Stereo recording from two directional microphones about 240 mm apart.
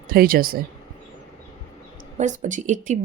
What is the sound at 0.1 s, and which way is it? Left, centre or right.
Speech, right.